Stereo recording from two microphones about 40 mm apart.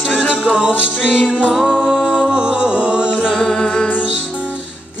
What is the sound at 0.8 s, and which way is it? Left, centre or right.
Music, centre.